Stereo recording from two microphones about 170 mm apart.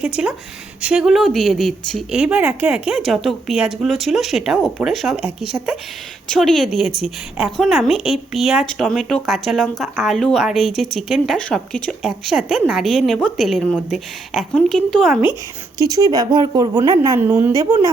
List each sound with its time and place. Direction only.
0.0 s a woman's voice: 5° right (ahead or behind)
15.9 s speech: 20° right (ahead or behind)